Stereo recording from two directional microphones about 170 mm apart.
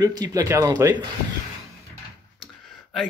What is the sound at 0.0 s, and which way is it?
Speech, 25° right (ahead or behind).